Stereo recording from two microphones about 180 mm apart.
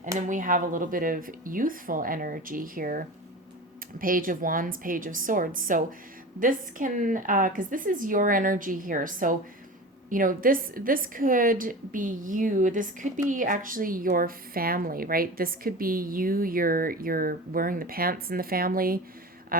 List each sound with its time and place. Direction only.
0.2 s a woman's voice: 45° right (ahead or behind)